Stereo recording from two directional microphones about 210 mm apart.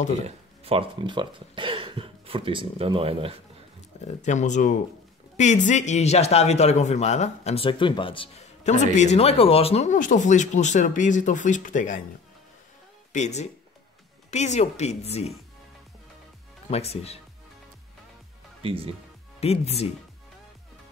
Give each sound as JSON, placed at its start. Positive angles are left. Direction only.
{"t": 0.2, "sound": "speech", "side_deg": -25}
{"t": 4.0, "sound": "a man's voice", "side_deg": 35}
{"t": 13.1, "sound": "a man's voice", "side_deg": 35}
{"t": 16.7, "sound": "speech", "side_deg": 30}
{"t": 18.6, "sound": "speech", "side_deg": -25}
{"t": 19.4, "sound": "speech", "side_deg": 30}